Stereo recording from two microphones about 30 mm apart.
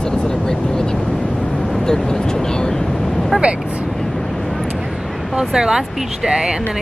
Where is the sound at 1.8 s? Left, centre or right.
Left.